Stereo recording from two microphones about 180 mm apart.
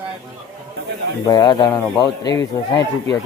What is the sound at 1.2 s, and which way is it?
A man's voice, 20° left (ahead or behind).